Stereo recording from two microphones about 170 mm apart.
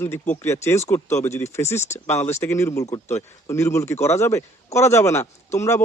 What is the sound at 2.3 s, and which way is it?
Speech, 15° left (ahead or behind).